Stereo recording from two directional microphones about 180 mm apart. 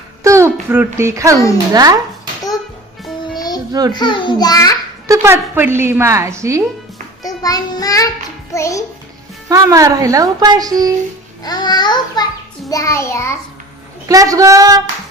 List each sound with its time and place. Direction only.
0.2 s a sound: 15° right (ahead or behind)
0.7 s a woman's voice: 10° right (ahead or behind)
3.3 s music: 20° left (ahead or behind)
3.7 s a child's voice: 20° right (ahead or behind)
3.9 s a child's voice: 25° left (ahead or behind)
5.0 s a woman's voice: 15° right (ahead or behind)
7.2 s child singing: 20° left (ahead or behind)
9.5 s a child's voice: 20° right (ahead or behind)
11.4 s a child's voice: 20° left (ahead or behind)
12.6 s child singing: 20° left (ahead or behind)
14.1 s a child's voice: 20° right (ahead or behind)